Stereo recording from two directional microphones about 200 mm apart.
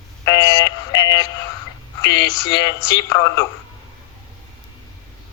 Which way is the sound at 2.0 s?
20° left (ahead or behind).